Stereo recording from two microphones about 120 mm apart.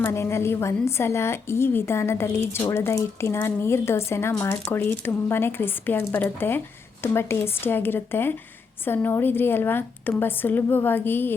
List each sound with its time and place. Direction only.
0.0 s a woman's voice: 20° left (ahead or behind)